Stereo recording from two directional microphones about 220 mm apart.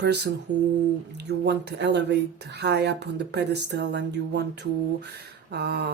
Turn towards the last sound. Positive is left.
turn(degrees=-50)  # may be behind; listen again after turning